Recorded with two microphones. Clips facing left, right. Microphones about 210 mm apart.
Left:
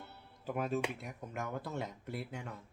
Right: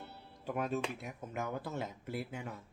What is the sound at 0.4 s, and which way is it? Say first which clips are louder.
Speech: even; centre (ahead or behind).